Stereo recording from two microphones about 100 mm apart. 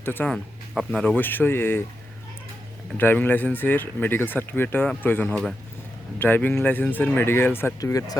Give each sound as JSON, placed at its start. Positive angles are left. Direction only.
{"t": 0.0, "sound": "speech", "side_deg": 20}
{"t": 0.3, "sound": "speech", "side_deg": 5}
{"t": 0.9, "sound": "speech", "side_deg": 15}
{"t": 3.0, "sound": "speech", "side_deg": 20}
{"t": 7.8, "sound": "speech", "side_deg": 35}